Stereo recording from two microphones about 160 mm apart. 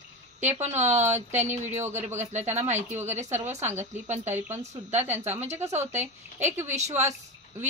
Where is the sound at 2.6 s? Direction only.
45° right (ahead or behind).